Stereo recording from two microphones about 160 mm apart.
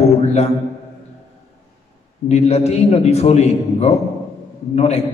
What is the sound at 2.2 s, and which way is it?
A man's voice, 40° left (ahead or behind).